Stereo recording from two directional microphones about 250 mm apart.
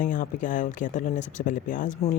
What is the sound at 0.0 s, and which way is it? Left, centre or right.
Speech, left.